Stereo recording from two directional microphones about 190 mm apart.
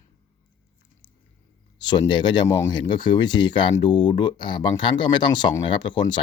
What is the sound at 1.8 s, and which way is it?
Speech, 20° left (ahead or behind).